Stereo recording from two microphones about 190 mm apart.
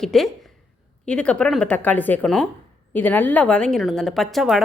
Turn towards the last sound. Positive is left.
turn(degrees=0)  # may be behind; listen again after turning